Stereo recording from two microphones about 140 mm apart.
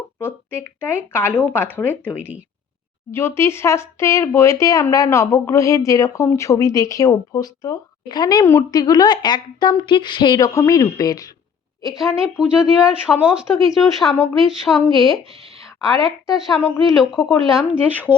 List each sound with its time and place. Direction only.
0.2 s a woman's voice: 15° left (ahead or behind)
11.9 s a woman's voice: centre (ahead or behind)